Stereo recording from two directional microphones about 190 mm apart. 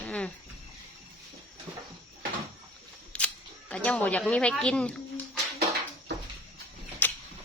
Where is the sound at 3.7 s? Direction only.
5° left (ahead or behind).